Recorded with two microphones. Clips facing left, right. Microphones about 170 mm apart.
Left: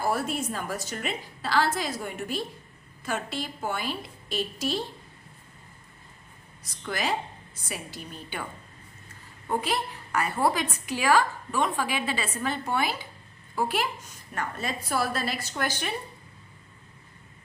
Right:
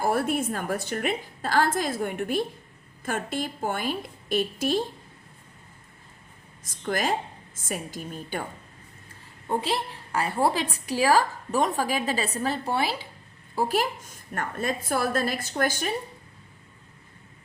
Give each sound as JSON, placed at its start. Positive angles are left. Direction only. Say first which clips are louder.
{"t": 0.0, "sound": "a woman's voice", "louder": "right 3 dB", "side_deg": -55}
{"t": 6.7, "sound": "a woman's voice", "louder": "right 3 dB", "side_deg": -45}
{"t": 9.5, "sound": "a woman's voice", "louder": "right 1 dB", "side_deg": -25}